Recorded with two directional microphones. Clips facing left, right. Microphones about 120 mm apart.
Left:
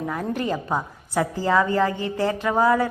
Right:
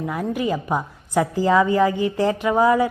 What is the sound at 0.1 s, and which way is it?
A woman's voice, 10° right (ahead or behind).